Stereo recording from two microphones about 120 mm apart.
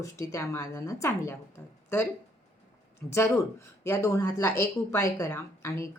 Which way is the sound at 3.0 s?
25° left (ahead or behind).